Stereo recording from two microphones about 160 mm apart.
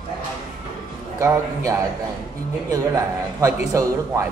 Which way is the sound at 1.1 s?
20° right (ahead or behind).